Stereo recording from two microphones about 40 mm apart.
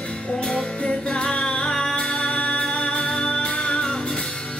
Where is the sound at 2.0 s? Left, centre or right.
Left.